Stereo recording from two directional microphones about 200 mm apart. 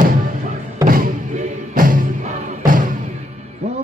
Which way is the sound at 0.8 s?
45° right (ahead or behind).